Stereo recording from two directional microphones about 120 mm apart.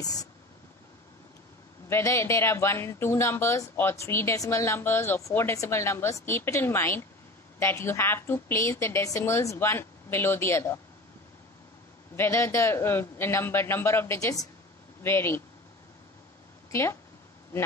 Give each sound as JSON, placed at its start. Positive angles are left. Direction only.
{"t": 1.9, "sound": "a woman's voice", "side_deg": 20}
{"t": 12.2, "sound": "a woman's voice", "side_deg": 25}